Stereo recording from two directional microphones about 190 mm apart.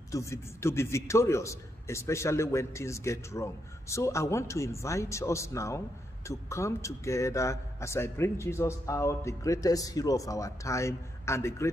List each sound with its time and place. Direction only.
0.1 s a man's voice: 15° left (ahead or behind)